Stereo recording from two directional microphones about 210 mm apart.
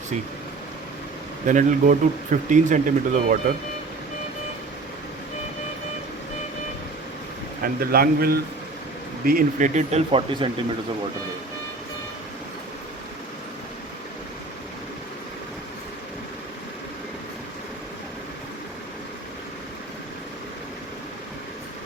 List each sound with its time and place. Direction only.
1.5 s speech: 35° right (ahead or behind)
7.6 s speech: 45° right (ahead or behind); by 10.5 s 25° right (ahead or behind)